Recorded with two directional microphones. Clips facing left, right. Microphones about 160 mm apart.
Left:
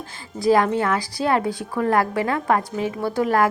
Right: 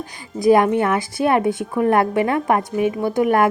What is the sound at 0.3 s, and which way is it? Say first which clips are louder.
A woman's voice: right 4 dB; 20° right (ahead or behind).